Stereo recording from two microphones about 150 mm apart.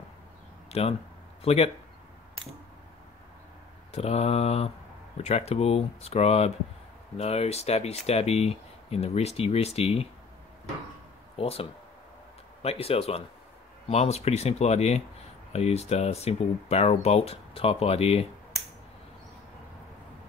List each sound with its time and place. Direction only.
0.7 s speech: 45° left (ahead or behind)
3.9 s speech: 45° left (ahead or behind)
11.3 s speech: 40° left (ahead or behind)